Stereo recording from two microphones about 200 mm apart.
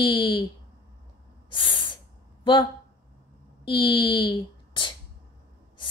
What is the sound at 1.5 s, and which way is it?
Snort, 25° left (ahead or behind).